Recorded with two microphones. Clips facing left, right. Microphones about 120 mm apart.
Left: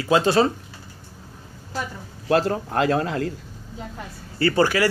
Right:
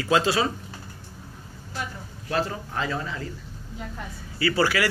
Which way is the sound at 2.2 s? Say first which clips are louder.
Left 7 dB; 60° left (ahead or behind).